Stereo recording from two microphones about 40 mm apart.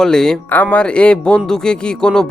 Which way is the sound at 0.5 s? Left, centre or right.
Left.